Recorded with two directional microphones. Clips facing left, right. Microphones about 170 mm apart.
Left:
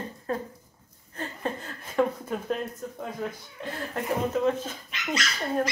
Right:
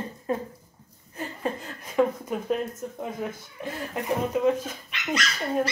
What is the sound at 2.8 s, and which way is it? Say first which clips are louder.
Speech: right 2 dB; 20° right (ahead or behind).